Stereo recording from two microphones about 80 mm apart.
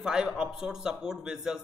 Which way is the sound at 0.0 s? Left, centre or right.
Centre.